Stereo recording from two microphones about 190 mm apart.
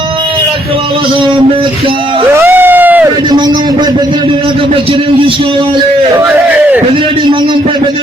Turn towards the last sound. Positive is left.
turn(degrees=-25)  # may be behind; listen again after turning